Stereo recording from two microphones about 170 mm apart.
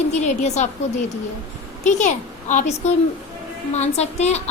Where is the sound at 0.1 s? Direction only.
40° left (ahead or behind).